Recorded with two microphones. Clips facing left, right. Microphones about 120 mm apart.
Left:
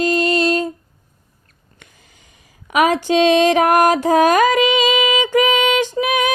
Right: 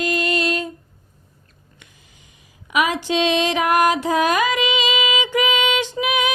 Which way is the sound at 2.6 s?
45° left (ahead or behind).